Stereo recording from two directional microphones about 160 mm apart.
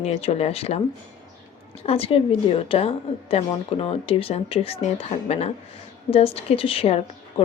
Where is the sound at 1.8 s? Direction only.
35° left (ahead or behind).